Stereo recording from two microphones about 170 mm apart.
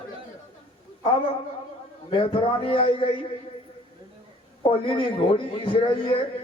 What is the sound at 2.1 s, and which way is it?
A man's voice, 30° left (ahead or behind).